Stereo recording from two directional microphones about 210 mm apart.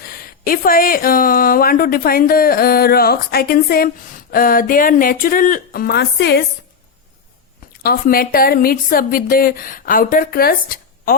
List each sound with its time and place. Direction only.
0.0 s speech: 40° left (ahead or behind)
7.8 s speech: 45° left (ahead or behind)